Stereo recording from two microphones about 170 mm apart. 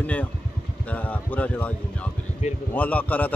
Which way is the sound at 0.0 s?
10° left (ahead or behind).